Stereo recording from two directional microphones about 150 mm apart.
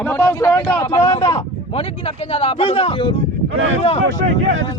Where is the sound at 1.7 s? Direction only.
40° left (ahead or behind).